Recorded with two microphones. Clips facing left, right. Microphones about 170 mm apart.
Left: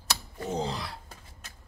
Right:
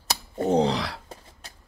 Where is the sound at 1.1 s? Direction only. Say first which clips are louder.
Right 6 dB; 35° right (ahead or behind).